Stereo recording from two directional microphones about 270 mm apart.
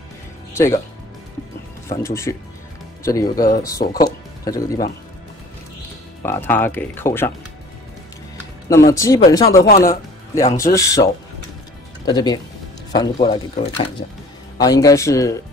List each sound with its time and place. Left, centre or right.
1.9 s speech: centre
3.3 s speech: left
4.0 s music: centre
6.2 s speech: centre
8.6 s speech: centre
12.1 s speech: centre